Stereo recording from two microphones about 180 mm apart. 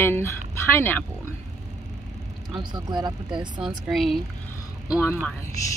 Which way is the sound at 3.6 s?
Centre (ahead or behind).